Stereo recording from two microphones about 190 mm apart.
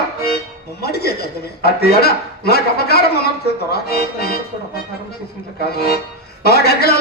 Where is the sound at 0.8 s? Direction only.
55° left (ahead or behind).